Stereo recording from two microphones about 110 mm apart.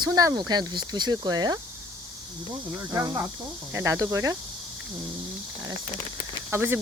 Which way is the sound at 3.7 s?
25° right (ahead or behind).